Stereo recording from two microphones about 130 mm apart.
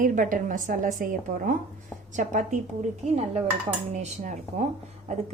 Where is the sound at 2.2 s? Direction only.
70° right (ahead or behind).